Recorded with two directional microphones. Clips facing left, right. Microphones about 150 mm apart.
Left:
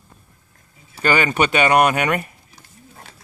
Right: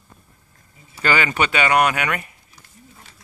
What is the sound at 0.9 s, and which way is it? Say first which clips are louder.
Speech: left 2 dB; 20° left (ahead or behind).